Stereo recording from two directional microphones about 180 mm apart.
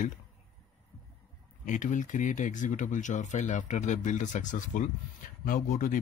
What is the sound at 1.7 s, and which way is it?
Speech, 45° left (ahead or behind).